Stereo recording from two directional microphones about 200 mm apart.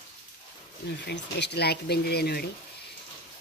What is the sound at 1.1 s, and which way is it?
Speech, 55° left (ahead or behind).